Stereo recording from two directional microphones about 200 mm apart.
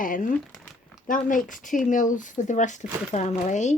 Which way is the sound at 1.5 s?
40° left (ahead or behind).